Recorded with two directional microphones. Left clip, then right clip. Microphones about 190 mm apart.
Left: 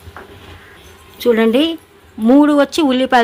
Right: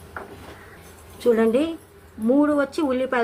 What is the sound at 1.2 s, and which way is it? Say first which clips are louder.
Speech: left 6 dB; 30° left (ahead or behind).